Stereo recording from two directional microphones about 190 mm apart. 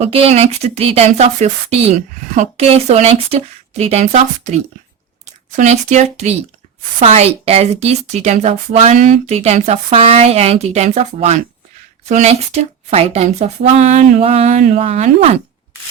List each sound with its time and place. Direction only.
0.0 s speech: 30° right (ahead or behind)